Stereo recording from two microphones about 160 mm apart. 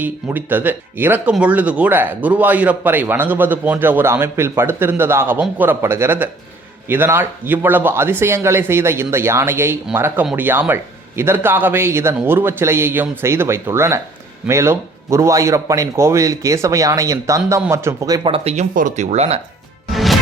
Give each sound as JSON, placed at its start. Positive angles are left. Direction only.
{"t": 0.0, "sound": "a man's voice", "side_deg": -10}
{"t": 18.3, "sound": "speech", "side_deg": -40}
{"t": 19.9, "sound": "music", "side_deg": 0}